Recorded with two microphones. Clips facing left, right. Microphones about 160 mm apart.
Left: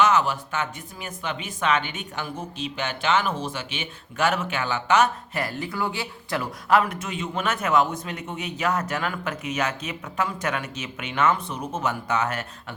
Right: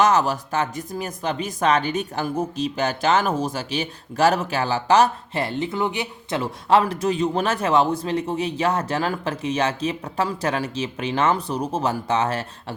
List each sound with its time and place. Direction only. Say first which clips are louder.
0.0 s speech: right 2 dB; 40° right (ahead or behind)